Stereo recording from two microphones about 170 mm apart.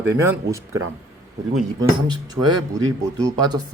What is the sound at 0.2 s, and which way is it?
Speech, 15° right (ahead or behind).